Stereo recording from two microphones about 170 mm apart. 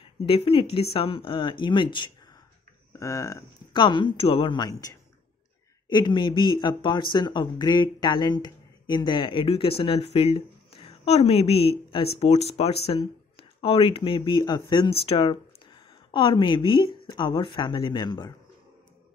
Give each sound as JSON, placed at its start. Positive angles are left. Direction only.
{"t": 0.0, "sound": "speech", "side_deg": 35}
{"t": 3.0, "sound": "speech", "side_deg": 20}